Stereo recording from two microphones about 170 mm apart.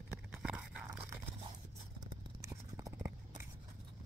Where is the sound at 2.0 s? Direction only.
20° right (ahead or behind).